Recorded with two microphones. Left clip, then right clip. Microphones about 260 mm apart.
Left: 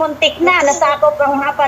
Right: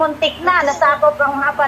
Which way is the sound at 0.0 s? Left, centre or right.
Left.